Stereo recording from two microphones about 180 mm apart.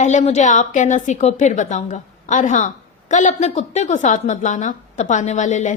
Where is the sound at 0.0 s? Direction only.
40° left (ahead or behind).